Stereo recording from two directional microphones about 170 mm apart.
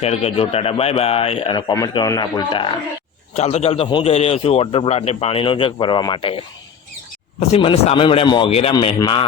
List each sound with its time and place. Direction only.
0.0 s a man's voice: 35° left (ahead or behind)
3.3 s a man's voice: 40° left (ahead or behind)